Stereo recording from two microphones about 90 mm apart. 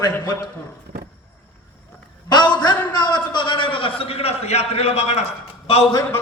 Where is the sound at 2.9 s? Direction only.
60° left (ahead or behind); by 4.3 s 90° left.